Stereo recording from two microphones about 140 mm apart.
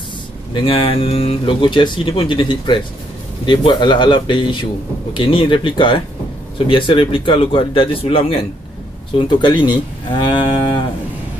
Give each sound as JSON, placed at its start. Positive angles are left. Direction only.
{"t": 0.7, "sound": "speech", "side_deg": 40}